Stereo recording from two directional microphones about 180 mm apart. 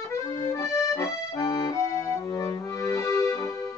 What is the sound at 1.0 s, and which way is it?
Accordion, 20° left (ahead or behind).